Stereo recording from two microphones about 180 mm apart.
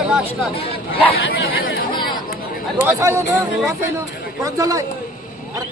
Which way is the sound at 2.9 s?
15° right (ahead or behind).